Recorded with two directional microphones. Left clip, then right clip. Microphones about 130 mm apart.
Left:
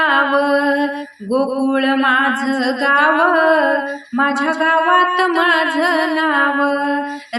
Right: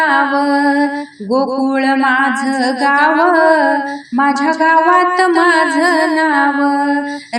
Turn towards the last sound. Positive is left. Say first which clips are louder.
# right 3 dB
turn(degrees=-25)  # may be behind; listen again after turning